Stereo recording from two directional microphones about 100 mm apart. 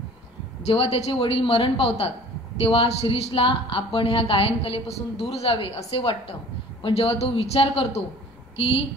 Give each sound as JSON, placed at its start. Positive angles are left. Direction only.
{"t": 0.7, "sound": "a woman's voice", "side_deg": 80}